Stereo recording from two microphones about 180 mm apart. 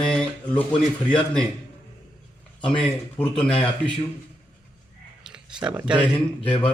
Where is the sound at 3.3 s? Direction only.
5° left (ahead or behind).